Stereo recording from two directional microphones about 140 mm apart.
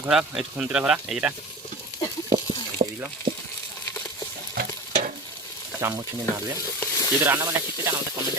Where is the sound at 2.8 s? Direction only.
55° right (ahead or behind).